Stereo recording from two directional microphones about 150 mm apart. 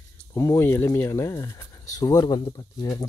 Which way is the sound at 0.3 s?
20° left (ahead or behind).